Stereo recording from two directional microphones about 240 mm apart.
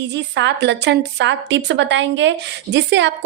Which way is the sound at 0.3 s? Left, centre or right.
Right.